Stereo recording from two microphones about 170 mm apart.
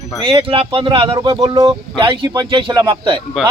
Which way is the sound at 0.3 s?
30° right (ahead or behind).